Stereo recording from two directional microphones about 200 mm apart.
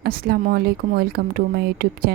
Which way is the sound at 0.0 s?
50° right (ahead or behind).